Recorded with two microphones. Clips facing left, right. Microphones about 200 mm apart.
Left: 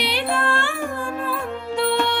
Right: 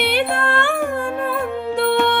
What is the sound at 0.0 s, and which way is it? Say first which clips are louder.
Music: right 4 dB; 55° right (ahead or behind).